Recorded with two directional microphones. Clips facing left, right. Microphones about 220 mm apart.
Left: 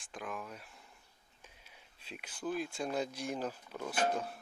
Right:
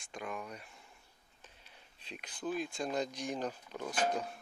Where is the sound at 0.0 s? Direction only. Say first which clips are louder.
Right 1 dB; centre (ahead or behind).